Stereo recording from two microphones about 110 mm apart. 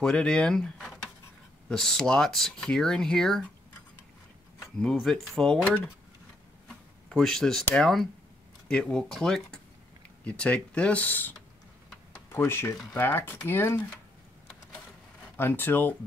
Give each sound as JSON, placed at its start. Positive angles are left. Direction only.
{"t": 0.0, "sound": "speech", "side_deg": 10}
{"t": 4.9, "sound": "speech", "side_deg": 0}
{"t": 6.7, "sound": "a sound", "side_deg": 5}
{"t": 7.7, "sound": "speech", "side_deg": 5}
{"t": 15.3, "sound": "speech", "side_deg": 20}